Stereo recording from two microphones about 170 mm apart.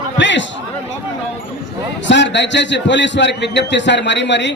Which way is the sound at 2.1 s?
90° left.